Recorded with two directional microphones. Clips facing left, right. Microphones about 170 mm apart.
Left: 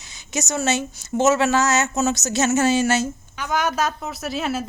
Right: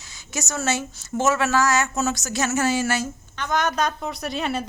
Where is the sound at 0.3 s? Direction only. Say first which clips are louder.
Left 3 dB; 20° left (ahead or behind).